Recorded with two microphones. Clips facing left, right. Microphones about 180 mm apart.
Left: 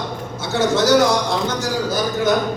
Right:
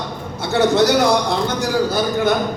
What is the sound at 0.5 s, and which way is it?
Speech, 60° right (ahead or behind).